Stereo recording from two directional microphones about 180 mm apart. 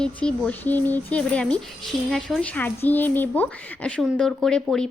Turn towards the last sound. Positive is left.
turn(degrees=5)  # may be behind; listen again after turning